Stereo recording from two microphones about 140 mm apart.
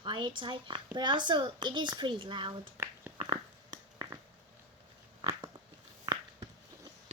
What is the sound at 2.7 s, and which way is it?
Finger snapping, 15° right (ahead or behind).